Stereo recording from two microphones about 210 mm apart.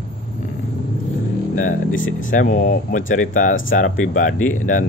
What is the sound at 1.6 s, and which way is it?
Speech, 40° left (ahead or behind).